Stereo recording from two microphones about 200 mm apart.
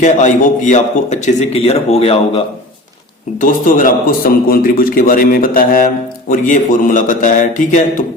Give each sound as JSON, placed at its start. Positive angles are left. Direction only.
{"t": 0.0, "sound": "a man's voice", "side_deg": 40}
{"t": 3.4, "sound": "a man's voice", "side_deg": 40}